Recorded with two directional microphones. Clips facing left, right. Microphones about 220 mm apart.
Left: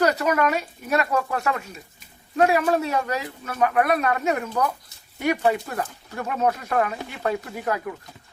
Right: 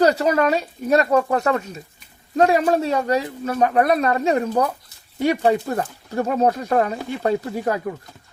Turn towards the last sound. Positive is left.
turn(degrees=-30)  # may be behind; listen again after turning